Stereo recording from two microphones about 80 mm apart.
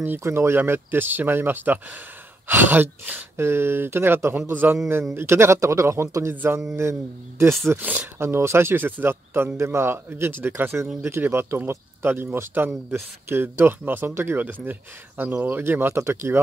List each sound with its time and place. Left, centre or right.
0.2 s speech: right
6.3 s speech: right
6.8 s speech: right
7.7 s speech: centre
8.2 s speech: right